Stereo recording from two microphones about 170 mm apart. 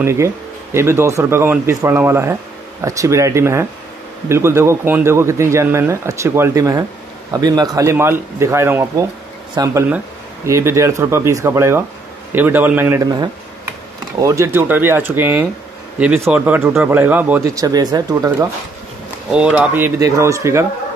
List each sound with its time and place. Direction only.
0.0 s speech: 15° right (ahead or behind)
17.6 s speech: 20° right (ahead or behind)
19.3 s speech: 5° right (ahead or behind)